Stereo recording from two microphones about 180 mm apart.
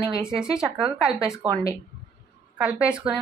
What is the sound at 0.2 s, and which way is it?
Speech, 5° right (ahead or behind).